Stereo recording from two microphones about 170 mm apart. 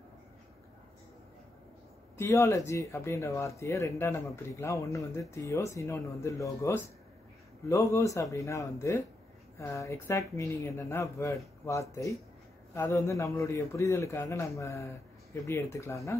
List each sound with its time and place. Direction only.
2.1 s speech: 15° left (ahead or behind)